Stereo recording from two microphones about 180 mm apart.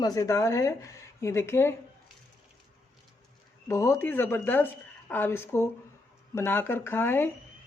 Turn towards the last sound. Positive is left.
turn(degrees=10)  # may be behind; listen again after turning